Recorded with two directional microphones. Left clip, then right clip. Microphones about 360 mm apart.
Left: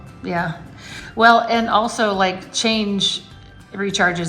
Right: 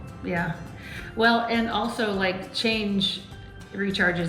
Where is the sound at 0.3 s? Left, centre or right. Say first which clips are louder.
Left 6 dB; centre.